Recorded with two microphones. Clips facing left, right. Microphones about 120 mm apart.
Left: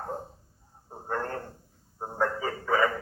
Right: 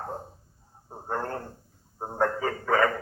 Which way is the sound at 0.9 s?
15° right (ahead or behind).